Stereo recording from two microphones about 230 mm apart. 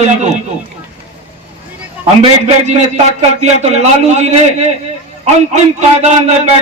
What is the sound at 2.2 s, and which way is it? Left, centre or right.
A man's voice, right.